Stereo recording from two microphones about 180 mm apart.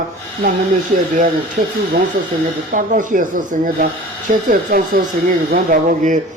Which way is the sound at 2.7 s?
45° right (ahead or behind).